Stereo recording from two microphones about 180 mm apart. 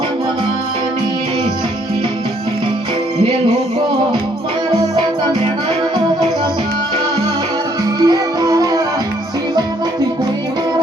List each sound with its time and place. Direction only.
7.9 s music: 20° right (ahead or behind)